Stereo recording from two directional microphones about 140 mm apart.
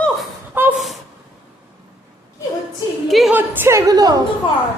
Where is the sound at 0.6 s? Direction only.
15° right (ahead or behind).